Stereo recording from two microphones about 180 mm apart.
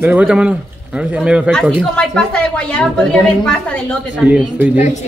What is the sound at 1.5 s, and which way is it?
A woman's voice, 5° left (ahead or behind).